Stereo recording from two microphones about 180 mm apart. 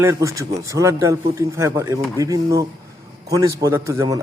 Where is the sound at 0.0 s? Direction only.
15° right (ahead or behind).